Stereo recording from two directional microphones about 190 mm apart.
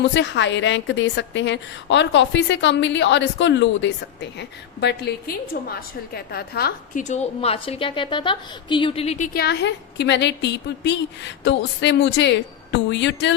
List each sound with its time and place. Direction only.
0.0 s a woman's voice: 70° left (ahead or behind)
5.5 s a woman's voice: 50° left (ahead or behind)
7.0 s a woman's voice: 35° left (ahead or behind)
9.3 s a woman's voice: 60° left (ahead or behind)